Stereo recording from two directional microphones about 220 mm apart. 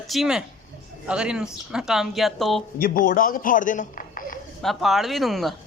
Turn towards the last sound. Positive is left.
turn(degrees=0)  # may be behind; listen again after turning